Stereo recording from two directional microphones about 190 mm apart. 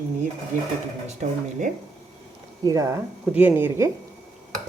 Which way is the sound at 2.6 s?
20° right (ahead or behind).